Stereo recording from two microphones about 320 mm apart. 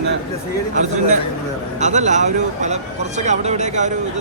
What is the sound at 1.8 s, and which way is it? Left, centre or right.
Speech, right.